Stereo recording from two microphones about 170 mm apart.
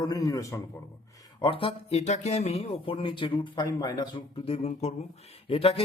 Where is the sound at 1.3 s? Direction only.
30° left (ahead or behind).